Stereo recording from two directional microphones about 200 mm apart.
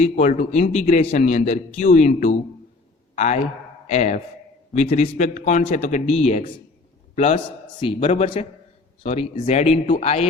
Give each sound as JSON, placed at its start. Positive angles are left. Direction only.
{"t": 0.0, "sound": "a man's voice", "side_deg": 35}